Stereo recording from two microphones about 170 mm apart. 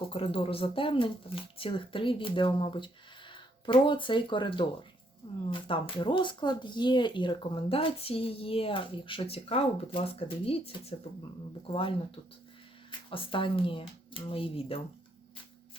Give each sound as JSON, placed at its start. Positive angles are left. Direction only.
{"t": 0.1, "sound": "speech", "side_deg": 35}